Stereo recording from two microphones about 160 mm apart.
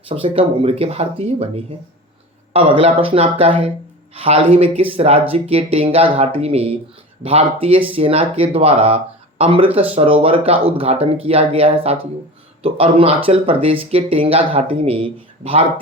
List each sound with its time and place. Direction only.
0.1 s speech: 35° right (ahead or behind)